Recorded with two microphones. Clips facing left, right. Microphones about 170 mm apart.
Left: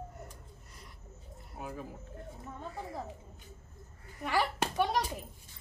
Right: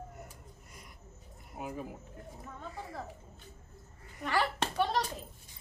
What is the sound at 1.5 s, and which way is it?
Speech, 15° right (ahead or behind).